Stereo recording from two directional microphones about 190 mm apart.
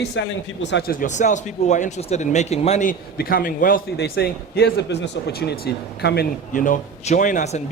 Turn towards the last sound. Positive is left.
turn(degrees=40)  # may be behind; listen again after turning